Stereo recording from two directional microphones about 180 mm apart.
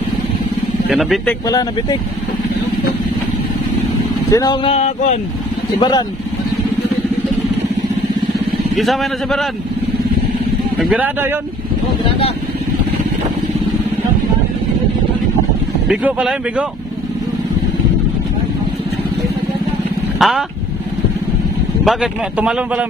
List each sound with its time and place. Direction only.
0.8 s a man's voice: centre (ahead or behind)
1.5 s speech: 20° left (ahead or behind)
4.3 s speech: 20° left (ahead or behind)
4.6 s speech: 40° left (ahead or behind)
5.8 s speech: 25° left (ahead or behind)
8.7 s a man's voice: centre (ahead or behind)
10.8 s a man's voice: 5° right (ahead or behind)
15.9 s a man's voice: 5° right (ahead or behind)
20.2 s speech: centre (ahead or behind)
21.8 s a man's voice: 5° right (ahead or behind)